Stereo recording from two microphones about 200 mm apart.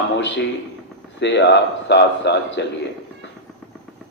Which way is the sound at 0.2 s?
60° left (ahead or behind).